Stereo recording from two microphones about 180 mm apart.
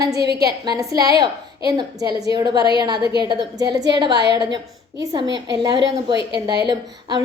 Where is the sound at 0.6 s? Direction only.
20° right (ahead or behind).